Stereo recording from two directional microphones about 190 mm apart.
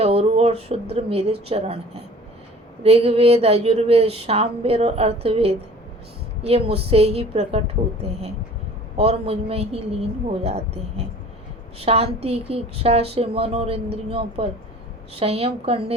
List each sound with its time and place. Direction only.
0.0 s a woman's voice: 30° right (ahead or behind)
2.8 s a woman's voice: 30° right (ahead or behind)
9.0 s a woman's voice: 30° right (ahead or behind)